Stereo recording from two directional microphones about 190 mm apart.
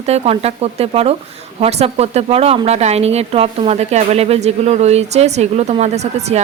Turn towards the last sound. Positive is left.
turn(degrees=-35)  # may be behind; listen again after turning